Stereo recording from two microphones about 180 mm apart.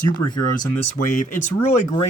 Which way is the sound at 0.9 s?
45° left (ahead or behind).